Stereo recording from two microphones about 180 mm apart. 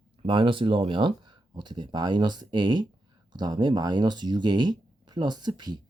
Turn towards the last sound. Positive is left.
turn(degrees=-25)  # may be behind; listen again after turning